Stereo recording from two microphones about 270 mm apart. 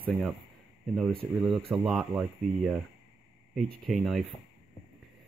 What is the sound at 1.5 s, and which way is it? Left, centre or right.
Speech, centre.